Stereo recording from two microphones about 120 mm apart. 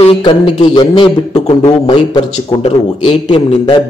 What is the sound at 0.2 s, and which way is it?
A man's voice, 45° left (ahead or behind).